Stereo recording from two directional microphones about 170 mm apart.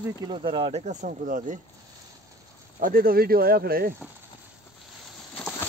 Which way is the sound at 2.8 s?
55° right (ahead or behind).